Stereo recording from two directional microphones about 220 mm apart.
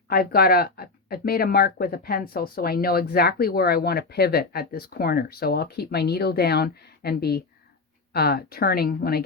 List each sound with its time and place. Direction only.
0.1 s speech: 45° left (ahead or behind)